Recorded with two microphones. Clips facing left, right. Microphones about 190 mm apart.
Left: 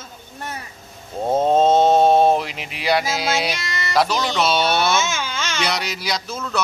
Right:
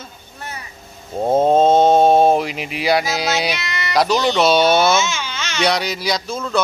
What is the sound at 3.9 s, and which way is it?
Speech, centre (ahead or behind).